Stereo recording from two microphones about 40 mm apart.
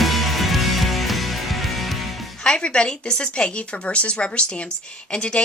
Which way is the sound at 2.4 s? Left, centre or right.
Left.